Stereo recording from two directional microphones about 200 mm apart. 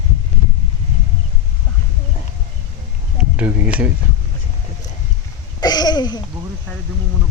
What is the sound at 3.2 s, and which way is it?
Speech, 5° right (ahead or behind).